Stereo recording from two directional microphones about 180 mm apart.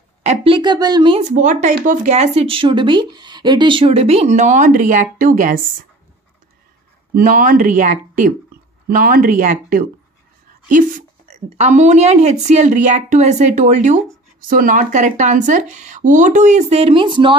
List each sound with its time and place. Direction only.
0.2 s a woman's voice: 35° right (ahead or behind)
1.3 s speech: 45° right (ahead or behind)
7.2 s speech: 50° right (ahead or behind); by 17.4 s 30° right (ahead or behind)